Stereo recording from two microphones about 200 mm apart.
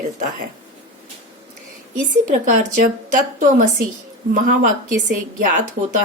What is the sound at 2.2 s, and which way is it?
A woman's voice, 40° right (ahead or behind).